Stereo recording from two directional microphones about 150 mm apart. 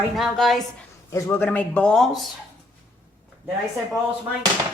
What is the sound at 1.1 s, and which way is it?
Speech, 15° left (ahead or behind).